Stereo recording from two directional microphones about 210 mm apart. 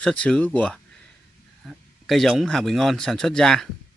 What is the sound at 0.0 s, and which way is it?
Speech, 5° left (ahead or behind).